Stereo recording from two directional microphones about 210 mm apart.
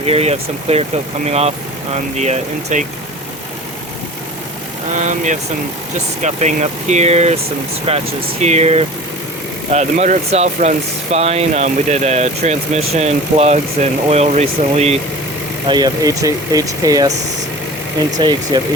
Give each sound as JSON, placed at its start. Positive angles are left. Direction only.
{"t": 0.0, "sound": "speech", "side_deg": -30}
{"t": 4.9, "sound": "speech", "side_deg": -35}
{"t": 15.6, "sound": "speech", "side_deg": -20}
{"t": 18.2, "sound": "speech", "side_deg": -20}